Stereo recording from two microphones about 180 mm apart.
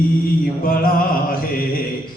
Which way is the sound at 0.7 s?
55° left (ahead or behind).